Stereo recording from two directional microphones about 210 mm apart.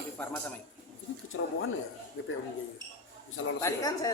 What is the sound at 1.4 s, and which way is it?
Speech, 65° left (ahead or behind).